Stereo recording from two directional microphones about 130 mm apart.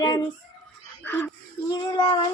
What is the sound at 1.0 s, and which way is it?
Speech, 15° left (ahead or behind).